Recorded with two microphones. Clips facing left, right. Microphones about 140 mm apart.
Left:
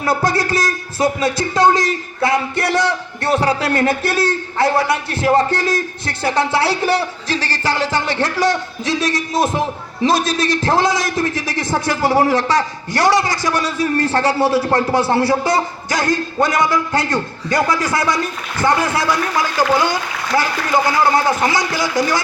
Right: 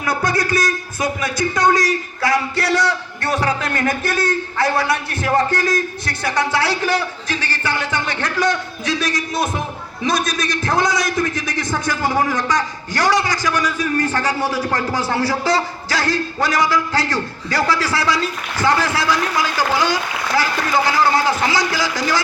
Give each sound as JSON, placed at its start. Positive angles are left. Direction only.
{"t": 0.0, "sound": "a man's voice", "side_deg": 25}
{"t": 21.4, "sound": "a man's voice", "side_deg": 25}